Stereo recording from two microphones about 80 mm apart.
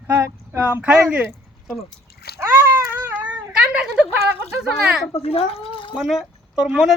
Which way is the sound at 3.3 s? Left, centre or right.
Centre.